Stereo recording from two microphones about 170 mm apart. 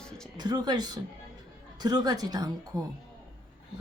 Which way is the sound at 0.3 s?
25° right (ahead or behind).